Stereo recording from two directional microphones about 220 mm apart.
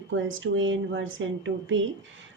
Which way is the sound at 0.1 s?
60° right (ahead or behind).